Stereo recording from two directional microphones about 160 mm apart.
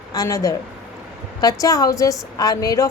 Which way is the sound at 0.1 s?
20° left (ahead or behind).